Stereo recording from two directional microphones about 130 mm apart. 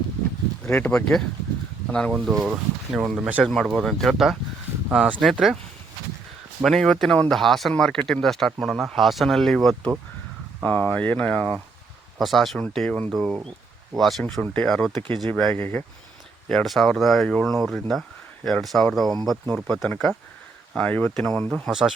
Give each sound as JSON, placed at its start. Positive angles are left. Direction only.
{"t": 0.6, "sound": "speech", "side_deg": 10}
{"t": 3.4, "sound": "speech", "side_deg": 0}
{"t": 6.6, "sound": "speech", "side_deg": 0}
{"t": 16.5, "sound": "speech", "side_deg": 0}
{"t": 21.5, "sound": "speech", "side_deg": -5}